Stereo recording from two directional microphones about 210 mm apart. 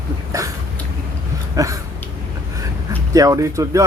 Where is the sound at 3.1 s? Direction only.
15° right (ahead or behind).